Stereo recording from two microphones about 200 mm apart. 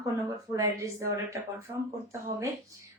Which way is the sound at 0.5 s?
15° right (ahead or behind).